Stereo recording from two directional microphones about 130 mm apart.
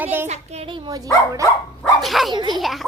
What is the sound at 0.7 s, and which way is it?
Speech, 30° right (ahead or behind).